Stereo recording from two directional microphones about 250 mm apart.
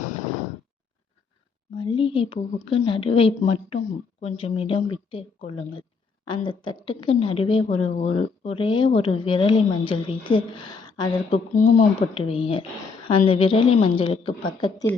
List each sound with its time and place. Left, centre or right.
1.8 s a woman's voice: left